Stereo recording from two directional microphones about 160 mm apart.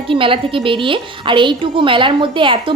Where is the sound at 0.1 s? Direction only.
35° right (ahead or behind).